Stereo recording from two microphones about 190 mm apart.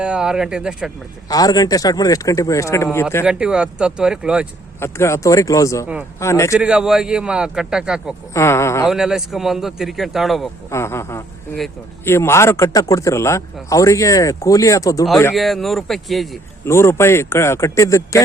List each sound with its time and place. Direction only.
0.0 s a man's voice: 5° right (ahead or behind)
1.3 s speech: 20° left (ahead or behind)
3.2 s a man's voice: 5° right (ahead or behind)
4.8 s a man's voice: 15° left (ahead or behind)
6.6 s a man's voice: 5° right (ahead or behind)
8.3 s a man's voice: 15° left (ahead or behind)
8.9 s a man's voice: 5° right (ahead or behind)
10.7 s a man's voice: 15° left (ahead or behind)
15.4 s a man's voice: centre (ahead or behind)
16.6 s a man's voice: 15° left (ahead or behind)